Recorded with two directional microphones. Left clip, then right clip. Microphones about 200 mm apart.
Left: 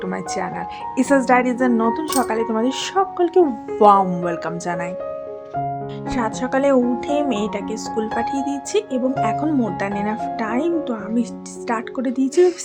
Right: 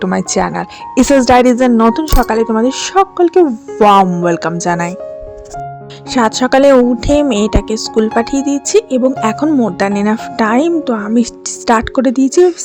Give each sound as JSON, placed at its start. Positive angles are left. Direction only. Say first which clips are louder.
{"t": 0.0, "sound": "speech", "louder": "right 10 dB", "side_deg": -40}
{"t": 6.1, "sound": "speech", "louder": "right 11 dB", "side_deg": -45}